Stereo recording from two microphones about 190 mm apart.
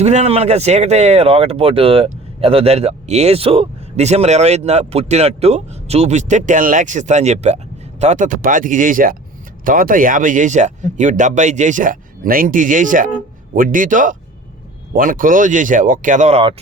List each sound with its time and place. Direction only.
0.0 s speech: 35° right (ahead or behind)